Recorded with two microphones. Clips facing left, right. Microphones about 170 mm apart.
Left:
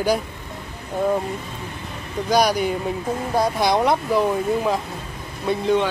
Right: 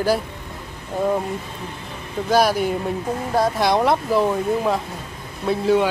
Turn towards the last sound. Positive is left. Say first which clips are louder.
# right 2 dB
turn(degrees=-5)  # may be behind; listen again after turning